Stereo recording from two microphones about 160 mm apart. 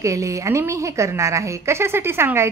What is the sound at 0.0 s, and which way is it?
A woman's voice, 20° right (ahead or behind).